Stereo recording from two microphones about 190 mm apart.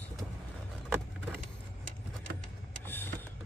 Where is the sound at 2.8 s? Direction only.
10° left (ahead or behind).